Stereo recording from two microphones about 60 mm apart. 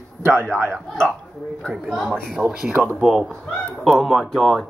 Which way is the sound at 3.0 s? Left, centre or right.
Centre.